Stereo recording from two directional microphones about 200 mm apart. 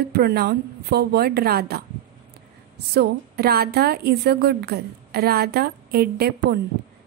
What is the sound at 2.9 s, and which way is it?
A woman's voice, 55° right (ahead or behind).